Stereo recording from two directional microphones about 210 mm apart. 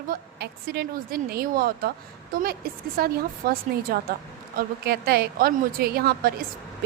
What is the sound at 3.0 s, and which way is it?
A woman's voice, 45° right (ahead or behind).